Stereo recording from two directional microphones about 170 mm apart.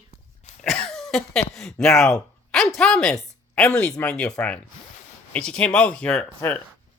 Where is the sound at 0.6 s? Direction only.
5° left (ahead or behind).